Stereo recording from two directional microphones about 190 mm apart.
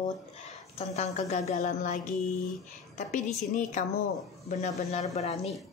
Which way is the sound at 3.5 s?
40° left (ahead or behind).